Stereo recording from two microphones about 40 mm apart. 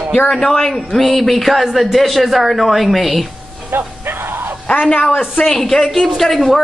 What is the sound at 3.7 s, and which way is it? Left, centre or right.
Speech, right.